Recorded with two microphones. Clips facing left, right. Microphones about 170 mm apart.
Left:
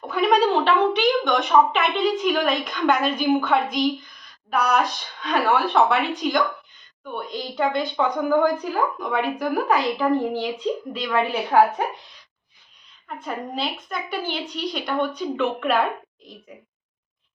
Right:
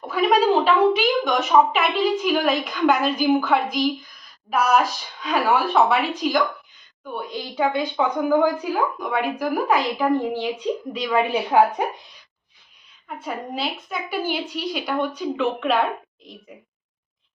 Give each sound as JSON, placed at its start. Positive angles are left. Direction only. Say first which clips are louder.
{"t": 0.1, "sound": "a woman's voice", "louder": "right 1 dB", "side_deg": 0}
{"t": 13.1, "sound": "a woman's voice", "louder": "even", "side_deg": -5}